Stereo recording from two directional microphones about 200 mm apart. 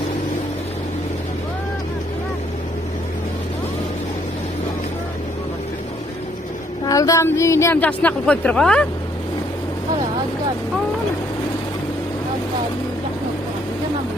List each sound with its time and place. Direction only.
6.8 s a woman's voice: 15° left (ahead or behind)